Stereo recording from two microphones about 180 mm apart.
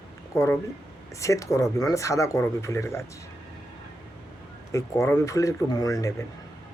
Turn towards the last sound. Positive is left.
turn(degrees=20)  # may be behind; listen again after turning